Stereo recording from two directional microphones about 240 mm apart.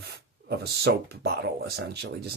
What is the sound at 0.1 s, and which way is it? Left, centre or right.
Speech, right.